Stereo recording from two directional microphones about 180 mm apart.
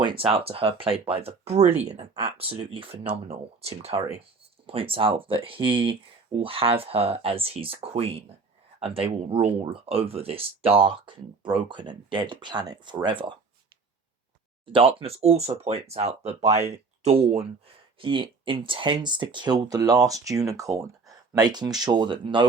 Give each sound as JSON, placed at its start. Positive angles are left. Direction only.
{"t": 0.0, "sound": "speech", "side_deg": -30}
{"t": 14.7, "sound": "speech", "side_deg": -30}